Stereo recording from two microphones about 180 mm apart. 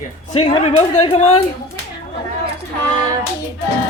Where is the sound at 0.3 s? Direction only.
35° left (ahead or behind).